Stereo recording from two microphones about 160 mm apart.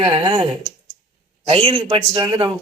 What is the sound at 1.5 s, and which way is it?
A woman's voice, 40° right (ahead or behind).